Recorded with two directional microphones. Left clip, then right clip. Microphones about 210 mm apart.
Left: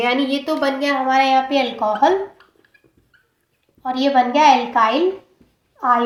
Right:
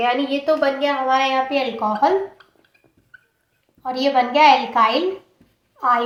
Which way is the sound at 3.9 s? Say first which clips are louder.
Left 2 dB; 35° left (ahead or behind).